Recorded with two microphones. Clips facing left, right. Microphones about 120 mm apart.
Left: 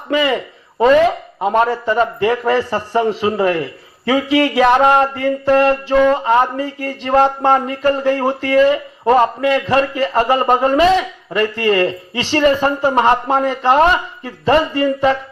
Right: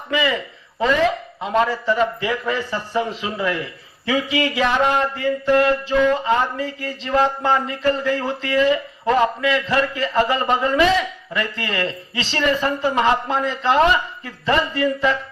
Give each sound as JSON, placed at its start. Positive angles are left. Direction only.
{"t": 0.1, "sound": "a man's voice", "side_deg": 50}
{"t": 1.4, "sound": "a man's voice", "side_deg": 45}
{"t": 14.3, "sound": "speech", "side_deg": 35}